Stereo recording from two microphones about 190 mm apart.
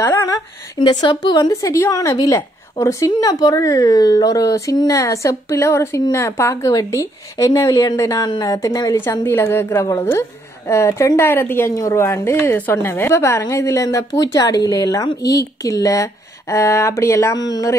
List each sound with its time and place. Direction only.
0.0 s a woman's voice: 15° left (ahead or behind)
0.8 s a woman's voice: 25° left (ahead or behind)